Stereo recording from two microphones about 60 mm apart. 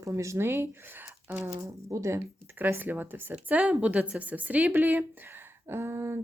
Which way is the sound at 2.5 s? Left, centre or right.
Right.